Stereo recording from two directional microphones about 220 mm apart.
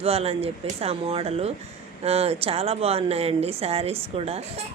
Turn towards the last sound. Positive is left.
turn(degrees=-25)  # may be behind; listen again after turning